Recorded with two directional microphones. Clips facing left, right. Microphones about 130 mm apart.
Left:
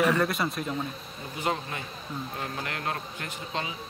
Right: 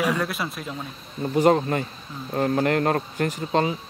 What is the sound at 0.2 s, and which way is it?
Speech, centre (ahead or behind).